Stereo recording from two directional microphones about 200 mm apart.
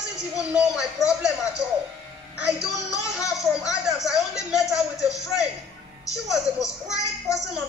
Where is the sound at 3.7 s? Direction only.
Centre (ahead or behind).